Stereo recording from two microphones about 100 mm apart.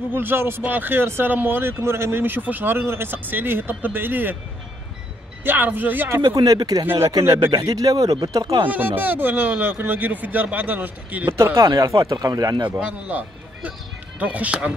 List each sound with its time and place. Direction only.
0.1 s speech: 20° right (ahead or behind)
5.4 s speech: 20° right (ahead or behind)
6.3 s speech: 35° right (ahead or behind)
8.6 s speech: 15° right (ahead or behind)
11.3 s speech: 25° right (ahead or behind)
12.6 s a man's voice: 10° right (ahead or behind)
14.2 s a man's voice: 15° right (ahead or behind)